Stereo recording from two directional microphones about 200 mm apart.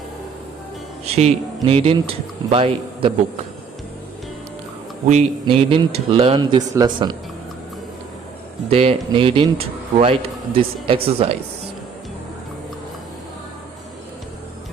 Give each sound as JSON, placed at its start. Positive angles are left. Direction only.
{"t": 1.0, "sound": "a man's voice", "side_deg": -30}
{"t": 5.0, "sound": "a man's voice", "side_deg": -30}
{"t": 8.7, "sound": "a man's voice", "side_deg": -30}